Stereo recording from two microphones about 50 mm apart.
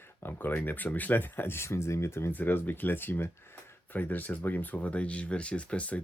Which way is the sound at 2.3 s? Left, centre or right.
Left.